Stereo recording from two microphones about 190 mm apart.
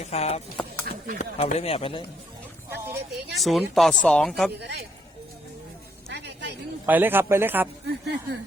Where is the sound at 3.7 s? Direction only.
5° left (ahead or behind).